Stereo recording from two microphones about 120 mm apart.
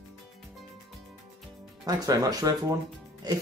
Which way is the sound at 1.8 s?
30° right (ahead or behind).